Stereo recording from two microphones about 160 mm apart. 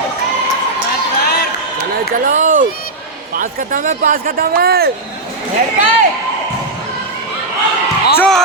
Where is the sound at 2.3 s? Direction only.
50° right (ahead or behind); by 4.9 s 75° right (ahead or behind).